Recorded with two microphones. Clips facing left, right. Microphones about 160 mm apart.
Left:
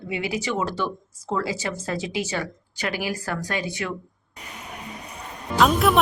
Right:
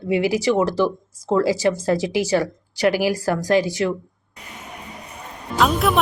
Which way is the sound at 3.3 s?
40° right (ahead or behind).